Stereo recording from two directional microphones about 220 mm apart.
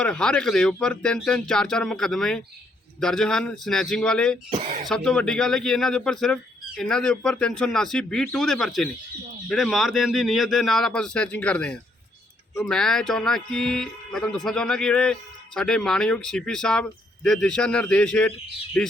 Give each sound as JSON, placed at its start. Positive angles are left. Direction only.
{"t": 0.0, "sound": "speech", "side_deg": 5}